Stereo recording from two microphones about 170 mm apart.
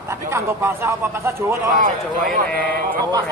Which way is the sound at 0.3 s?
15° right (ahead or behind).